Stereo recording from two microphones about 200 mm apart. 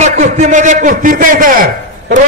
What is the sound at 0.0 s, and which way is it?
A man's voice, 40° right (ahead or behind).